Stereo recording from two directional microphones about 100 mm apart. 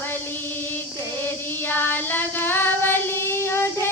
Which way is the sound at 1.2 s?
20° left (ahead or behind).